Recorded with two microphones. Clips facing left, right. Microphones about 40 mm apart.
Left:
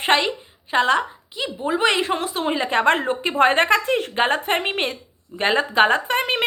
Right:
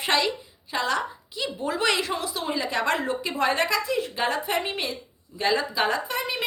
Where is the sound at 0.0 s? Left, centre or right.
Left.